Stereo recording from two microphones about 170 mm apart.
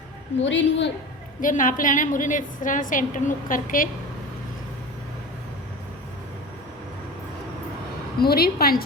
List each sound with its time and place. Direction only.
0.4 s a woman's voice: 90° left
1.4 s a woman's voice: 50° left (ahead or behind)
8.2 s a woman's voice: 65° left (ahead or behind)